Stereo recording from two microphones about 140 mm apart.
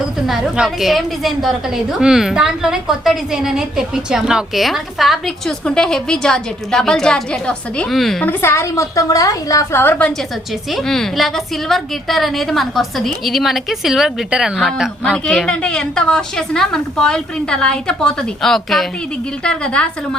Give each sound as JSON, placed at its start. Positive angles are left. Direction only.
{"t": 0.3, "sound": "a woman's voice", "side_deg": -5}
{"t": 8.3, "sound": "a woman's voice", "side_deg": 20}
{"t": 10.7, "sound": "a woman's voice", "side_deg": 0}